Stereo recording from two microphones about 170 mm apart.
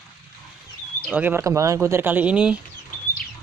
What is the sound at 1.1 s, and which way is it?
Speech, 10° right (ahead or behind).